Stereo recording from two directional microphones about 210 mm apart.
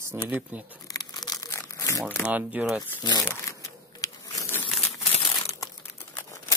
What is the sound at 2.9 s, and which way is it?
Crumpling, 15° left (ahead or behind).